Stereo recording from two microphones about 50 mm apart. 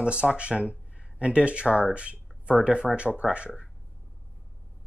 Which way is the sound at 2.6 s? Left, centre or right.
Centre.